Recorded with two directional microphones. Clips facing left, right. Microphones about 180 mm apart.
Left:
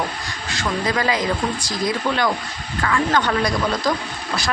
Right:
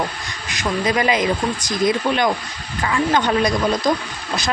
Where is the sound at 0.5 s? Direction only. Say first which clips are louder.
Right 2 dB; 20° right (ahead or behind).